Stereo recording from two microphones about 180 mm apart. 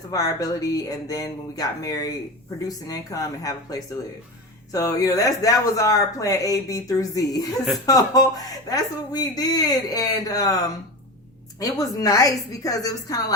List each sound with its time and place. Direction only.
0.1 s speech: 20° left (ahead or behind)
11.6 s speech: 20° left (ahead or behind)